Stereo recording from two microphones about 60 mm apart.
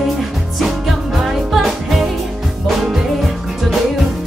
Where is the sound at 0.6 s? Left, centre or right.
Centre.